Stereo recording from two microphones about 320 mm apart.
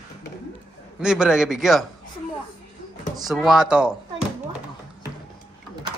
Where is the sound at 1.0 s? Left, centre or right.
Centre.